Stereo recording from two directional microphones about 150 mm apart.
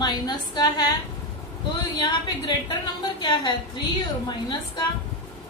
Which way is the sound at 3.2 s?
25° left (ahead or behind).